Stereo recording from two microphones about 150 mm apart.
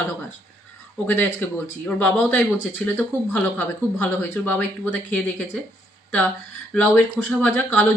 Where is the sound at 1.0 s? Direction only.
15° left (ahead or behind).